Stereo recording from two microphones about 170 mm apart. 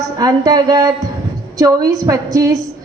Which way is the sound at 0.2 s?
20° right (ahead or behind).